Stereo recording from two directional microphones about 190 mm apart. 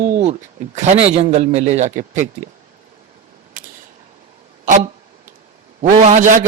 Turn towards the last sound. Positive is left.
turn(degrees=-40)  # may be behind; listen again after turning